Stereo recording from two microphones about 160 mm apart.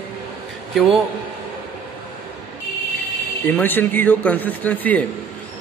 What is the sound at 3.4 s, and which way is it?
Speech, 10° left (ahead or behind).